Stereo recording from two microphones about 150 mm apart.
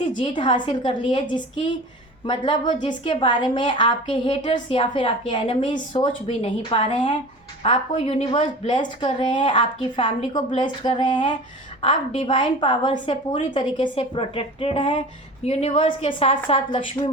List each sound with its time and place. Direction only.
0.2 s a woman's voice: 30° left (ahead or behind)